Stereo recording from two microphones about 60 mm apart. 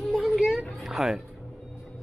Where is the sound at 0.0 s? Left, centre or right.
Centre.